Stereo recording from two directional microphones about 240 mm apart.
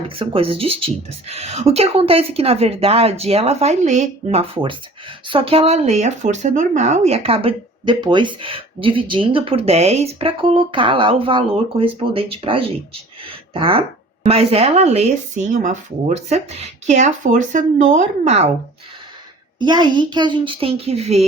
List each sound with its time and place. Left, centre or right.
0.2 s speech: right
19.5 s speech: centre